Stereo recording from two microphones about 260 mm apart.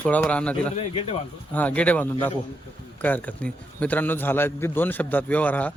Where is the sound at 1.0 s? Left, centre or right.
Left.